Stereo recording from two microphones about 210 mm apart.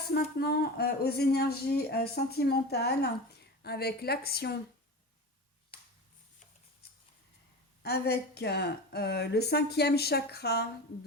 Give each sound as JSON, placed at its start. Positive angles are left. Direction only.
{"t": 0.1, "sound": "speech", "side_deg": 50}
{"t": 7.8, "sound": "speech", "side_deg": 50}